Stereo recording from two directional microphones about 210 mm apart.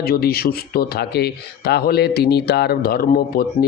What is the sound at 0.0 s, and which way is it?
Speech, 45° left (ahead or behind).